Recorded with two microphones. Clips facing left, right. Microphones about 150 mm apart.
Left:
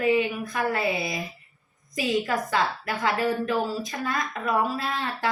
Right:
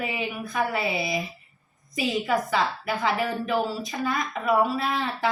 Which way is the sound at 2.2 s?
Centre (ahead or behind).